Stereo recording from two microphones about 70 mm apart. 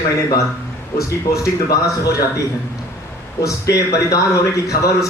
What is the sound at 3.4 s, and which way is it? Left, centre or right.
Speech, left.